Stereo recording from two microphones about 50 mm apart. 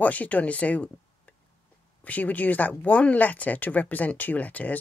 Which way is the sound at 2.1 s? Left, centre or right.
Left.